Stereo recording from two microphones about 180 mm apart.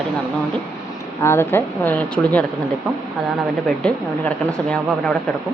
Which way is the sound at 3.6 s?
5° left (ahead or behind).